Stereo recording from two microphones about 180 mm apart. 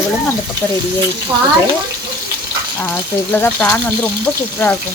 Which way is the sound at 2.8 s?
10° left (ahead or behind).